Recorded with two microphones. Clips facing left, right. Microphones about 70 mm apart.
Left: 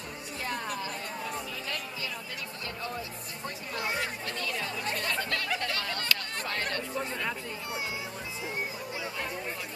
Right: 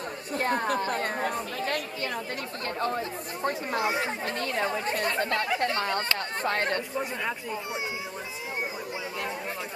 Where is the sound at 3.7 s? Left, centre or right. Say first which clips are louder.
Right 3 dB; right.